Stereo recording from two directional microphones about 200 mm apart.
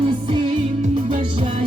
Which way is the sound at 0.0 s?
25° right (ahead or behind).